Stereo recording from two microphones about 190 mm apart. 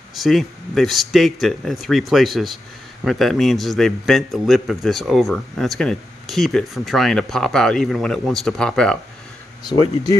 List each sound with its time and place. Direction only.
0.1 s a man's voice: centre (ahead or behind)
9.7 s speech: 20° left (ahead or behind)